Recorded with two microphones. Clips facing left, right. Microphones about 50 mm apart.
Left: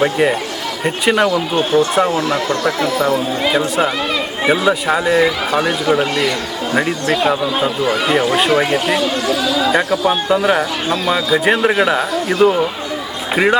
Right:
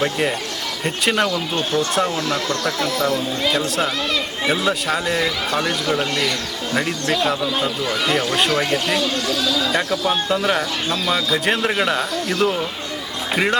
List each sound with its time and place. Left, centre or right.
0.0 s speech: centre
11.1 s speech: centre